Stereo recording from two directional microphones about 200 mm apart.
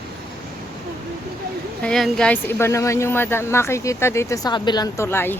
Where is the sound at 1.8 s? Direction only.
5° left (ahead or behind).